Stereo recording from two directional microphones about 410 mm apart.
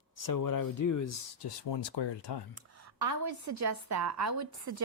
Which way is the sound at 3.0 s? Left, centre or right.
Right.